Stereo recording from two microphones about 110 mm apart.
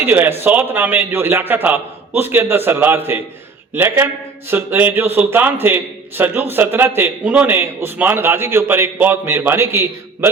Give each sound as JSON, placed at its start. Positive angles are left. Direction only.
{"t": 0.0, "sound": "a man's voice", "side_deg": -15}